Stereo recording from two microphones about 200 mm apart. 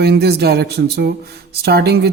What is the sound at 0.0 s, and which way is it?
Speech, 55° right (ahead or behind).